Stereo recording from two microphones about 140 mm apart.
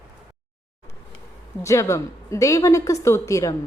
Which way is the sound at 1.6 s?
20° left (ahead or behind).